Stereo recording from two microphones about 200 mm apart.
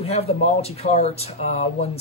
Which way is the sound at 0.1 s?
30° left (ahead or behind).